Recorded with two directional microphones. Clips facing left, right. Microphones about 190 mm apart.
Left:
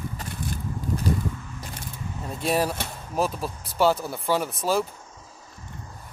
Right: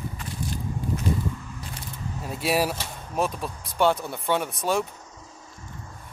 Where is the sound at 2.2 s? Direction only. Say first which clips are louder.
Even; 5° right (ahead or behind).